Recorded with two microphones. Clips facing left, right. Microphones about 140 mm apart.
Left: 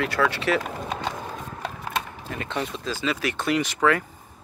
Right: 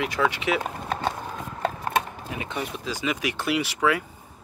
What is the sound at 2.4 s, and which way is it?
Speech, 10° right (ahead or behind).